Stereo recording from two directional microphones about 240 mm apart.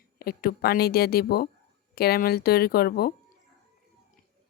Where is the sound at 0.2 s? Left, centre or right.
Left.